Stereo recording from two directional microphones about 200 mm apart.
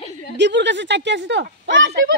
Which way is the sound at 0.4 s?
60° right (ahead or behind).